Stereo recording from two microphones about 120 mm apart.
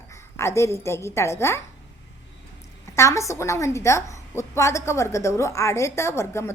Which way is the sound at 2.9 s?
25° left (ahead or behind).